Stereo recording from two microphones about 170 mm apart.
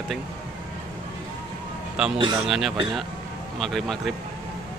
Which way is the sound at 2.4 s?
Centre (ahead or behind).